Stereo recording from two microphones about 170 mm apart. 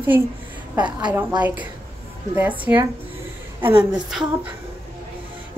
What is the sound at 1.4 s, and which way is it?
A woman's voice, 10° right (ahead or behind).